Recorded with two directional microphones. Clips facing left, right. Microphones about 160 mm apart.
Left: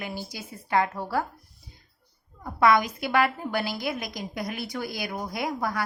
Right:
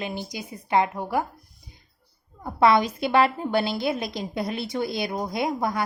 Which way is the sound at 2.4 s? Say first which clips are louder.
Right 2 dB; 30° right (ahead or behind).